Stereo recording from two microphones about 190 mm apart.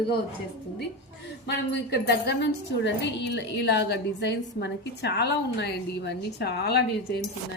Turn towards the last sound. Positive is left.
turn(degrees=60)  # may be behind; listen again after turning